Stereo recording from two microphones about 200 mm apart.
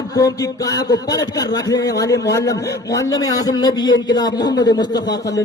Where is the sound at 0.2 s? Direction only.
15° left (ahead or behind).